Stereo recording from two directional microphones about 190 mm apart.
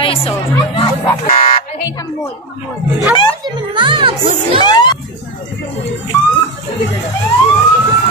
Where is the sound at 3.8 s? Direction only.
25° right (ahead or behind).